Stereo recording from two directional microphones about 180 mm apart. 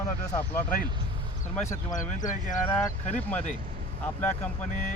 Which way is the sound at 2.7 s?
10° left (ahead or behind).